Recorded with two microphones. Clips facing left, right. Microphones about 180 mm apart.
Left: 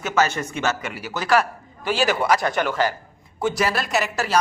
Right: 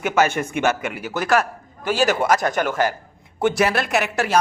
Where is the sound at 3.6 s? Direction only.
60° right (ahead or behind).